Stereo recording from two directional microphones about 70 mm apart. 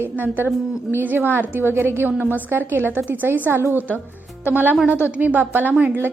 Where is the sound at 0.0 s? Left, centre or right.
Right.